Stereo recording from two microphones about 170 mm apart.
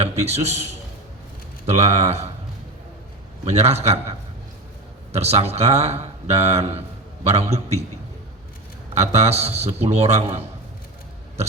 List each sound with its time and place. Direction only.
0.0 s a man's voice: 40° right (ahead or behind)
3.4 s a man's voice: 40° right (ahead or behind)
5.1 s a man's voice: 40° right (ahead or behind)
9.0 s a man's voice: 40° right (ahead or behind)
11.4 s a sound: 40° right (ahead or behind)